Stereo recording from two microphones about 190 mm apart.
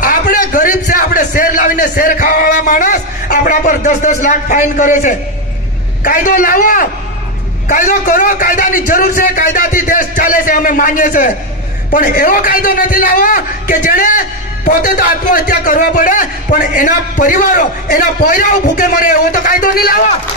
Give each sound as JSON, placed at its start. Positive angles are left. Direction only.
{"t": 0.0, "sound": "a man's voice", "side_deg": 45}